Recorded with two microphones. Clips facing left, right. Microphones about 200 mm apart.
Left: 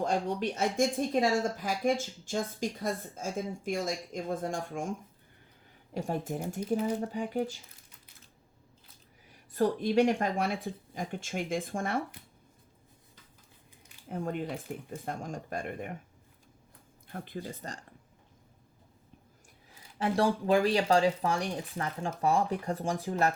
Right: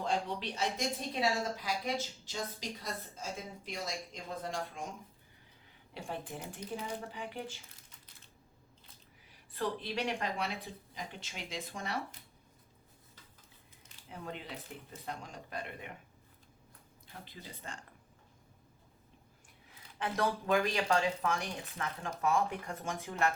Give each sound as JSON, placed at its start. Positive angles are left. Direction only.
{"t": 0.0, "sound": "speech", "side_deg": 45}
{"t": 9.5, "sound": "speech", "side_deg": 45}
{"t": 14.1, "sound": "speech", "side_deg": 50}
{"t": 17.1, "sound": "speech", "side_deg": 55}
{"t": 20.0, "sound": "speech", "side_deg": 30}